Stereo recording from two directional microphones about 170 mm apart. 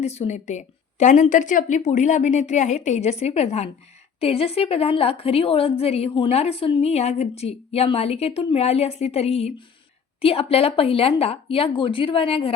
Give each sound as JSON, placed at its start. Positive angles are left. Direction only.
{"t": 0.0, "sound": "a woman's voice", "side_deg": 40}